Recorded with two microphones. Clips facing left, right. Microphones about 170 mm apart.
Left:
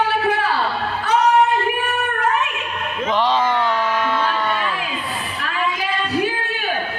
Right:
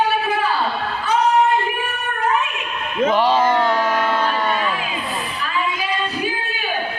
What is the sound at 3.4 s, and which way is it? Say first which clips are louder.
Carnatic music: right 2 dB; 40° right (ahead or behind).